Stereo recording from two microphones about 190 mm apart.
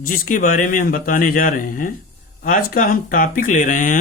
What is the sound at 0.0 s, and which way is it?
Speech, 50° left (ahead or behind).